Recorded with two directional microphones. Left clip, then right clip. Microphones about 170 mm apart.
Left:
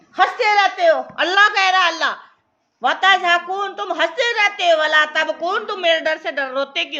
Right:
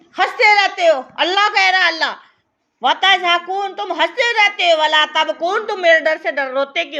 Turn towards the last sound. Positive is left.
turn(degrees=-20)  # may be behind; listen again after turning